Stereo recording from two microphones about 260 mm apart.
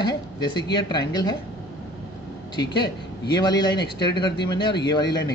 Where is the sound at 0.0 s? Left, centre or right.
Centre.